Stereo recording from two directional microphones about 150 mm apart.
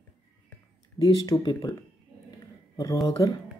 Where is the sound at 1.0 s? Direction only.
25° left (ahead or behind).